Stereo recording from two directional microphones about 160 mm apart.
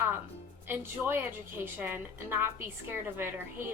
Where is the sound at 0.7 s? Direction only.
10° right (ahead or behind).